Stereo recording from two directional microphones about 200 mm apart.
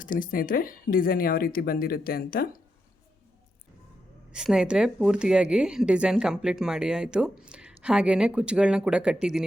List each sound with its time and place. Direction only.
0.0 s speech: 45° left (ahead or behind)
4.3 s speech: 5° right (ahead or behind)